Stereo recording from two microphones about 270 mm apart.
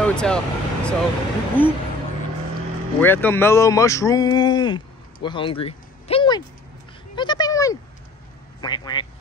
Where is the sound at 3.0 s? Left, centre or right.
Centre.